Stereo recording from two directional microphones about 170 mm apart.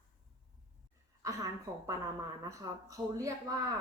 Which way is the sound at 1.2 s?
20° right (ahead or behind).